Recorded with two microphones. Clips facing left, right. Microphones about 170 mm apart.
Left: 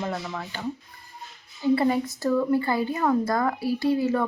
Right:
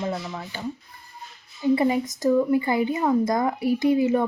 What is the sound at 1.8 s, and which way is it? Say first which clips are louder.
Speech: right 1 dB; 15° right (ahead or behind).